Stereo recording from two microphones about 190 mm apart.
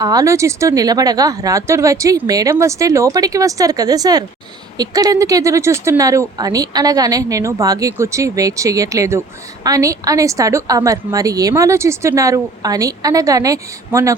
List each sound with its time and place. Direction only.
0.0 s a woman's voice: 20° right (ahead or behind)